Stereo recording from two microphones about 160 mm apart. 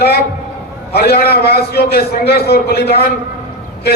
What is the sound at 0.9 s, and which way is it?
A man's voice, 80° left.